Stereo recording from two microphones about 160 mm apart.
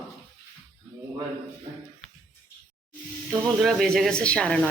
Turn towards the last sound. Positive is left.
turn(degrees=5)  # may be behind; listen again after turning